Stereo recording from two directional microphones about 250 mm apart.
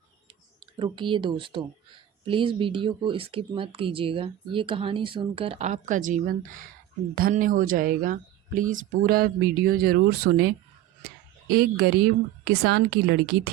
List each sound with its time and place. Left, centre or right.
0.3 s speech: centre; by 13.5 s right